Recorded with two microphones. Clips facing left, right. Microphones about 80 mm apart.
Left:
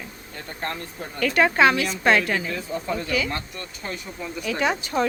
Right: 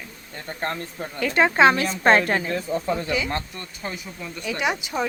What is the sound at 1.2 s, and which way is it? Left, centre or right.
A woman's voice, right.